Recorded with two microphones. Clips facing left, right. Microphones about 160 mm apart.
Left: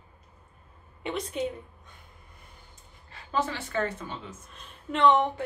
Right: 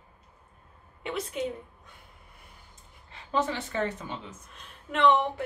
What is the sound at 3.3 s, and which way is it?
A woman's voice, 20° right (ahead or behind).